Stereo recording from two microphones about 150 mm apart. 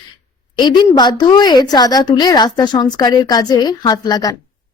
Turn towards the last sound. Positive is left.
turn(degrees=25)  # may be behind; listen again after turning